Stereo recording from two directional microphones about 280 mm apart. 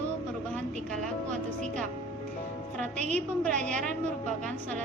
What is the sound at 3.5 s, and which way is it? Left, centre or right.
Speech, right.